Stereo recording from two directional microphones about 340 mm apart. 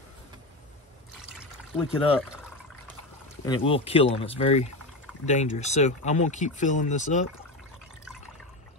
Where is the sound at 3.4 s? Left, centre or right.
Centre.